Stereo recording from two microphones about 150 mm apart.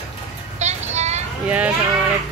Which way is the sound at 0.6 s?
50° right (ahead or behind).